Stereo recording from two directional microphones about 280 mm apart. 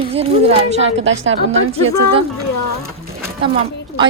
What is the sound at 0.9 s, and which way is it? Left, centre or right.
Speech, right.